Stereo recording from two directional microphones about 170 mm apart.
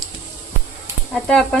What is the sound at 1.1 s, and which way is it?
Speech, 5° left (ahead or behind).